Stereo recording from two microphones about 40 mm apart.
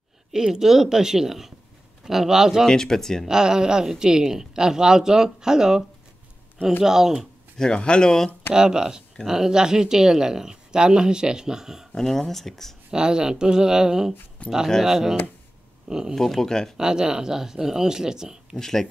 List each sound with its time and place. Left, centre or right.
0.3 s speech: centre
2.7 s speech: centre
3.3 s speech: centre
7.5 s speech: centre
8.5 s speech: centre
11.9 s speech: centre
12.9 s speech: centre
14.4 s speech: left
14.8 s speech: centre
15.9 s speech: centre
16.2 s speech: centre
16.7 s speech: centre
18.6 s speech: centre